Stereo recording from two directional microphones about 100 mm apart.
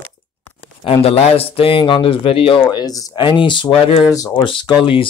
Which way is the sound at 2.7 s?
40° left (ahead or behind).